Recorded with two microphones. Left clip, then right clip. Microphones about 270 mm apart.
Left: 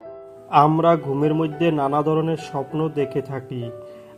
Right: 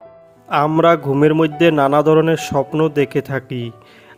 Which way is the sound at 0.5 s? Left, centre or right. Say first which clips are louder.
Right 2 dB; right.